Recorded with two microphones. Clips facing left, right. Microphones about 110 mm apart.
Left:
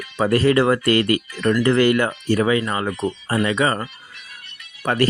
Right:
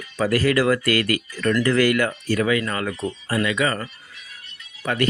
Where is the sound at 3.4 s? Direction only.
30° left (ahead or behind).